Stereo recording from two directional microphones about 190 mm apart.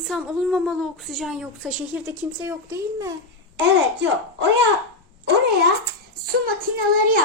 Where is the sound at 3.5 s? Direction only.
70° right (ahead or behind).